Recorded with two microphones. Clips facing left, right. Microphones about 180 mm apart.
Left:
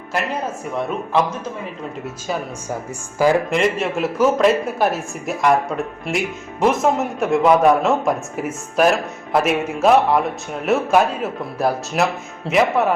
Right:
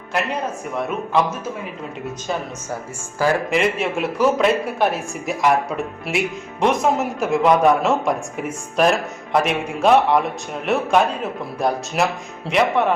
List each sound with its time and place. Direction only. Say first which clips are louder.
3.5 s a woman's voice: left 1 dB; centre (ahead or behind)